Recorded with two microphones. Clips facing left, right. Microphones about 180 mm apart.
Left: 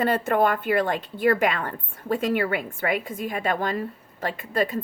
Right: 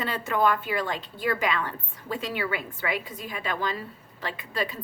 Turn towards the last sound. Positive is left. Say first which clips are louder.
# left 6 dB
turn(degrees=50)  # may be behind; listen again after turning